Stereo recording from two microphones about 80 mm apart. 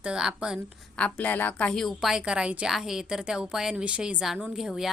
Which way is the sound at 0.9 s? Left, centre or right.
Centre.